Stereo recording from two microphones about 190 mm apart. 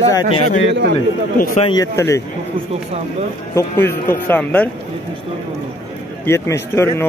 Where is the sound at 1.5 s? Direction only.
30° left (ahead or behind).